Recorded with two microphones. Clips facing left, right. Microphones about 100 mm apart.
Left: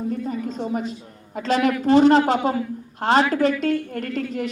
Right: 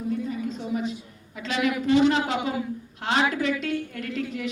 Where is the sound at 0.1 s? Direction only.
40° left (ahead or behind).